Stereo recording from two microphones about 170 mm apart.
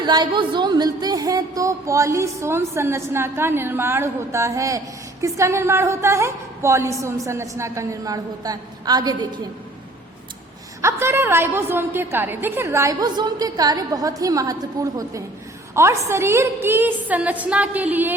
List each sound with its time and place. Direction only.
0.0 s a woman's voice: 25° right (ahead or behind)
10.8 s a woman's voice: 15° right (ahead or behind)